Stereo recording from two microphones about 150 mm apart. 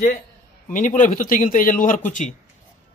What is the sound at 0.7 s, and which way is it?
Speech, 60° left (ahead or behind).